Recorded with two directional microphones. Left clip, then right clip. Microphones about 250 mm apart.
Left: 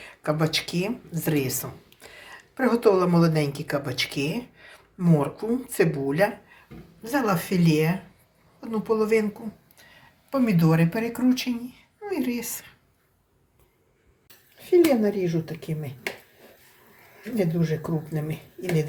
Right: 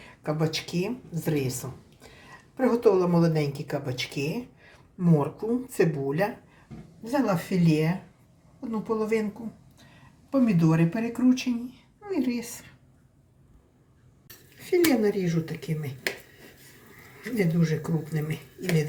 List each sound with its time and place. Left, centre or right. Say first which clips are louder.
0.0 s speech: left 3 dB; centre
10.2 s speech: left 1 dB; centre
14.7 s speech: left 3 dB; centre
17.3 s speech: left 1 dB; centre